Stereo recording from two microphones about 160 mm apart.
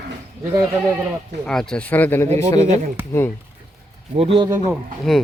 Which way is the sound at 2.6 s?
50° right (ahead or behind).